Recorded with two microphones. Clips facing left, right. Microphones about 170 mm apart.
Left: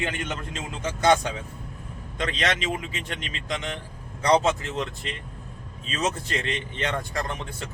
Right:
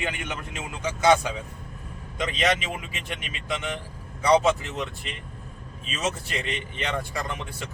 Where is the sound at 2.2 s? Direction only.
10° right (ahead or behind).